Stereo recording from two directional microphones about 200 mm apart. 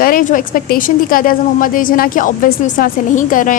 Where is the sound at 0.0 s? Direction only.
45° left (ahead or behind).